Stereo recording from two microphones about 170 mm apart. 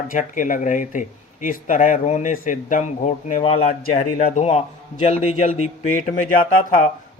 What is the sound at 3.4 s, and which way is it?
Speech, 35° left (ahead or behind).